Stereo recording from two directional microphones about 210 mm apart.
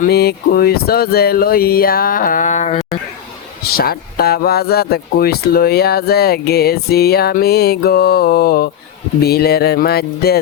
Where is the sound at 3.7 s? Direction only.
45° left (ahead or behind).